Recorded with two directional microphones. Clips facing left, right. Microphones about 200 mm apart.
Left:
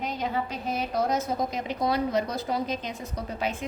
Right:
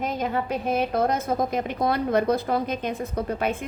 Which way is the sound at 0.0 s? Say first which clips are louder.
Right 3 dB; 50° right (ahead or behind).